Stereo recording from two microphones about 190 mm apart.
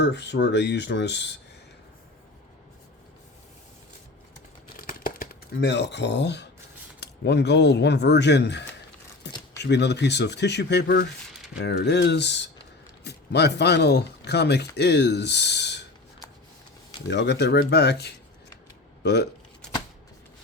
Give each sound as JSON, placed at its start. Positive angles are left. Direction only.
{"t": 0.0, "sound": "speech", "side_deg": 65}
{"t": 4.8, "sound": "a sound", "side_deg": 50}
{"t": 7.0, "sound": "speech", "side_deg": 60}
{"t": 9.2, "sound": "keys jangling", "side_deg": 60}
{"t": 9.6, "sound": "speech", "side_deg": 65}
{"t": 17.1, "sound": "speech", "side_deg": 65}